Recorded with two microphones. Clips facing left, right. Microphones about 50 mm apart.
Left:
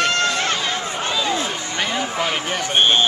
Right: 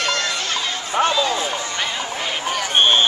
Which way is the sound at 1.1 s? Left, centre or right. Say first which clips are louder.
Right 2 dB; centre.